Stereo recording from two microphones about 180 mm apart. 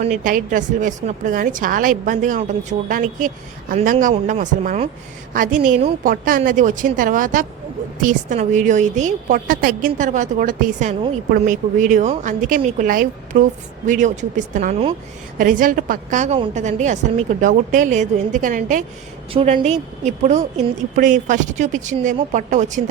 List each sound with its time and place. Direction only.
0.0 s a woman's voice: 45° right (ahead or behind)
19.3 s a woman's voice: 30° right (ahead or behind)